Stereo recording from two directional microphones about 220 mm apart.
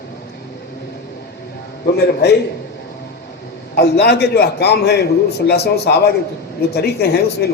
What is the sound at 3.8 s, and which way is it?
A man's voice, 50° left (ahead or behind).